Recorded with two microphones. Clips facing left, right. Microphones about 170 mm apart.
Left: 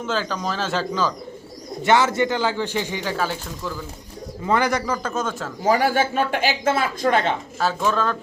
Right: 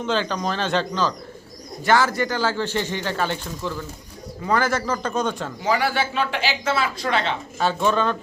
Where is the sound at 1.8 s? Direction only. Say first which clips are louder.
Left 1 dB; 20° left (ahead or behind); by 3.8 s 5° left (ahead or behind).